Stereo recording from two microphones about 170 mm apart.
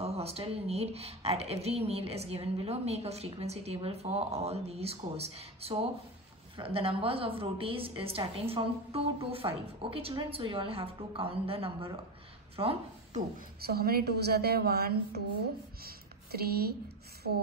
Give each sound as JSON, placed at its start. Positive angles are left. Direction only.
{"t": 0.0, "sound": "a woman's voice", "side_deg": -35}
{"t": 13.7, "sound": "a woman's voice", "side_deg": -65}
{"t": 15.8, "sound": "a sound", "side_deg": -65}